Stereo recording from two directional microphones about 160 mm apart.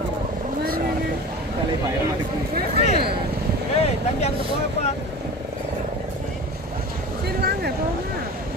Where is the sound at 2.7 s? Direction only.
40° left (ahead or behind).